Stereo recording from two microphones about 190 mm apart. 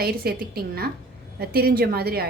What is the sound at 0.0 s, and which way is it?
A woman's voice, 50° right (ahead or behind).